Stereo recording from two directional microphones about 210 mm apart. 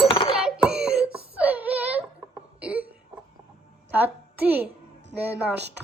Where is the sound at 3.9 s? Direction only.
10° right (ahead or behind).